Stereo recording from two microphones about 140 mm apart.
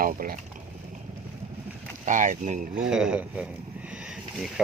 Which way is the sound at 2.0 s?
65° right (ahead or behind).